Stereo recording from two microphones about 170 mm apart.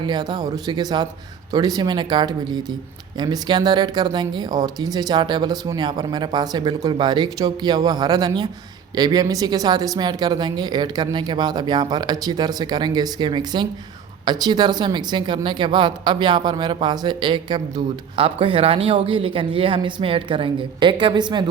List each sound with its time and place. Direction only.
0.0 s speech: 25° right (ahead or behind)